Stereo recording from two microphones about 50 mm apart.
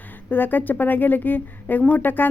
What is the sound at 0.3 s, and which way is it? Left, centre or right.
Speech, left.